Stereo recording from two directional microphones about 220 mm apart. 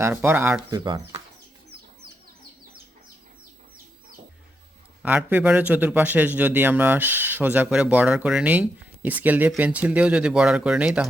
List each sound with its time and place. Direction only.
0.0 s a man's voice: 10° right (ahead or behind)
0.9 s speech: 20° right (ahead or behind)
5.0 s a man's voice: 5° right (ahead or behind)